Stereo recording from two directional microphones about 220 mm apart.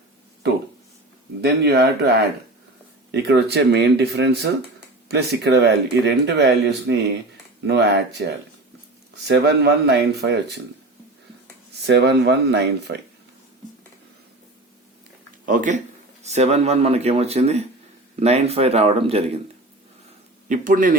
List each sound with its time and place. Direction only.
1.4 s speech: 50° right (ahead or behind)
3.1 s speech: 50° right (ahead or behind)
11.8 s speech: 50° right (ahead or behind)
15.4 s speech: 35° right (ahead or behind)
20.5 s speech: 35° right (ahead or behind)